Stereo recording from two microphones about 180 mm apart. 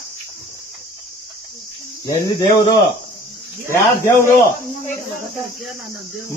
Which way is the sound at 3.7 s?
15° left (ahead or behind).